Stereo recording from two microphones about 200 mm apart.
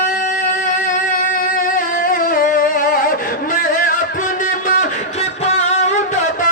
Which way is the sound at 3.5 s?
45° left (ahead or behind).